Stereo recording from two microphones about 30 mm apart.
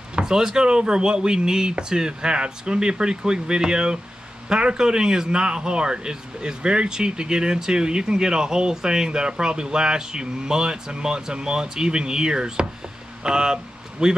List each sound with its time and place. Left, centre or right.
0.2 s speech: centre